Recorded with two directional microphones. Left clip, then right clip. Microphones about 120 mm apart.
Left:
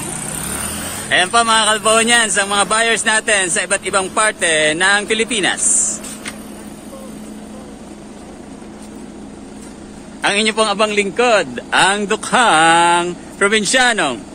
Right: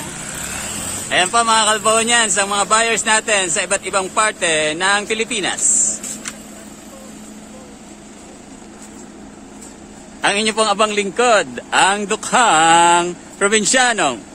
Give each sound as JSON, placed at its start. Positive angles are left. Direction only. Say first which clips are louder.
{"t": 1.1, "sound": "a man's voice", "louder": "left 1 dB", "side_deg": -15}
{"t": 10.2, "sound": "a man's voice", "louder": "left 1 dB", "side_deg": -35}
{"t": 11.7, "sound": "speech", "louder": "left 1 dB", "side_deg": -35}